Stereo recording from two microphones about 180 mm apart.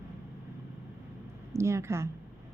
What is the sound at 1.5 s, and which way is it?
Speech, 15° right (ahead or behind).